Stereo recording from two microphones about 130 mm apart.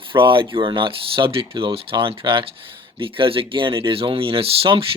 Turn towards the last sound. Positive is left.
turn(degrees=-40)  # may be behind; listen again after turning